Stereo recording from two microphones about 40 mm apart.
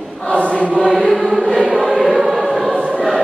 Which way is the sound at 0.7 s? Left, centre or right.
Left.